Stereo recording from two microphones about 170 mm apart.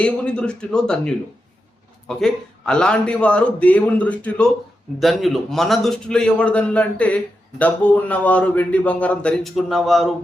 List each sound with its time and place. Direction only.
0.0 s a man's voice: 5° left (ahead or behind)